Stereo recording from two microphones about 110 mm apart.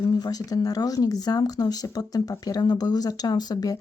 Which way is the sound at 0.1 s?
35° left (ahead or behind).